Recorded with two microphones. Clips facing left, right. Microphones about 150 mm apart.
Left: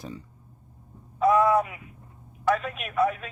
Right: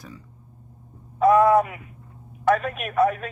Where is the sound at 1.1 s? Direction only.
55° right (ahead or behind).